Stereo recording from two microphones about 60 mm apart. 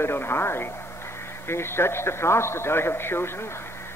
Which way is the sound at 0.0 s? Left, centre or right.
Left.